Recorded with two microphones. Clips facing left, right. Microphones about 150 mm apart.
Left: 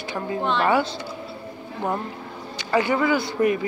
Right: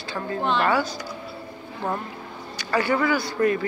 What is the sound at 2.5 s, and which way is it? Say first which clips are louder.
Speech: left 1 dB; 20° left (ahead or behind).